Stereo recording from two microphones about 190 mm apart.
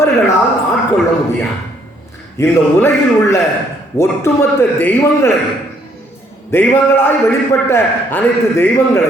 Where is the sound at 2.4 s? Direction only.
15° left (ahead or behind).